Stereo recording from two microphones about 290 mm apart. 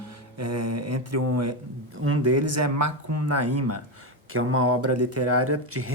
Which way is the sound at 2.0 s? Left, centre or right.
Right.